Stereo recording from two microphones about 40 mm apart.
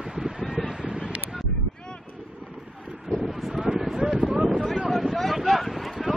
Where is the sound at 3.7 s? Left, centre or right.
Centre.